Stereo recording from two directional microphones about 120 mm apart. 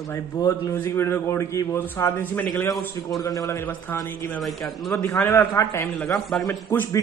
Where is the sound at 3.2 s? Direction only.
30° left (ahead or behind).